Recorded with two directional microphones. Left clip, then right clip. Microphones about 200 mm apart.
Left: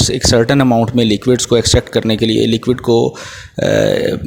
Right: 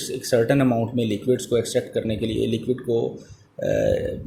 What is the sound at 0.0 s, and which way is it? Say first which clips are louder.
A man's voice: left 9 dB; 50° left (ahead or behind).